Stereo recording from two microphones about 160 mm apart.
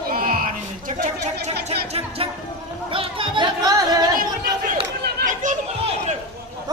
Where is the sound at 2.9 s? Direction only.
35° right (ahead or behind).